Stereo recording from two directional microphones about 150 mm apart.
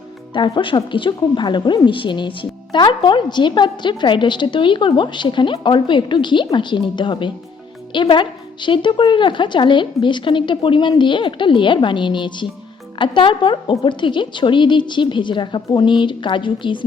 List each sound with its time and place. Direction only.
0.3 s a woman's voice: 30° left (ahead or behind)